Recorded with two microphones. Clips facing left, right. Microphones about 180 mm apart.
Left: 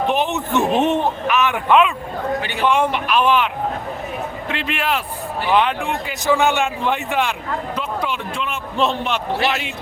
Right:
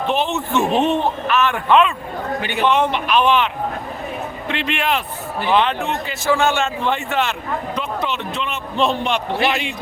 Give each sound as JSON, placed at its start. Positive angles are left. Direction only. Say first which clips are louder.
{"t": 0.1, "sound": "a man's voice", "louder": "even", "side_deg": 15}
{"t": 2.4, "sound": "a man's voice", "louder": "right 2 dB", "side_deg": -20}
{"t": 2.6, "sound": "a man's voice", "louder": "even", "side_deg": 10}